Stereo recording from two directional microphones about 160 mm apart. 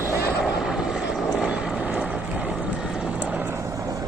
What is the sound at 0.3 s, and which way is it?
Vehicle, 5° right (ahead or behind).